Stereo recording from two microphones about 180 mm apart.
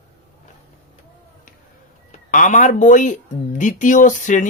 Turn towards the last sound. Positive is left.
turn(degrees=45)  # may be behind; listen again after turning